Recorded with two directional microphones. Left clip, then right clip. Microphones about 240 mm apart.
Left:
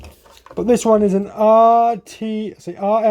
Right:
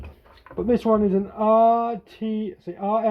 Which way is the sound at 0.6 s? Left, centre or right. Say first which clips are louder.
Left 6 dB; left.